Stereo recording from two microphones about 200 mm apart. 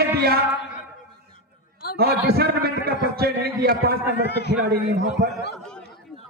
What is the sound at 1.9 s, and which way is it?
A man's voice, 50° right (ahead or behind).